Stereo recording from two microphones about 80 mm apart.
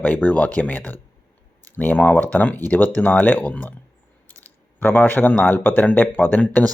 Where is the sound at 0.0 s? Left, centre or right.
Left.